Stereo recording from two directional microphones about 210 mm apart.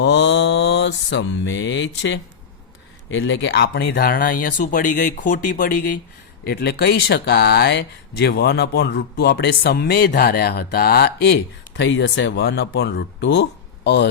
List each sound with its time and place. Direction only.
0.0 s mantra: 55° left (ahead or behind)
3.1 s speech: 60° left (ahead or behind)